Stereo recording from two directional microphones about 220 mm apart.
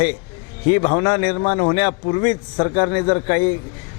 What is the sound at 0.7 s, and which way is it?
A man's voice, 25° left (ahead or behind).